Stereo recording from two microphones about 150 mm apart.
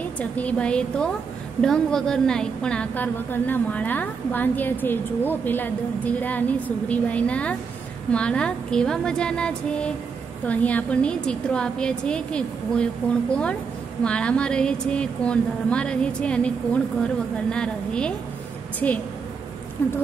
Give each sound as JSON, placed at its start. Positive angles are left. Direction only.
{"t": 0.2, "sound": "a woman's voice", "side_deg": 10}